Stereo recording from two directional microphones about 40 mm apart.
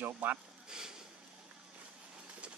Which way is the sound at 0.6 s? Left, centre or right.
Centre.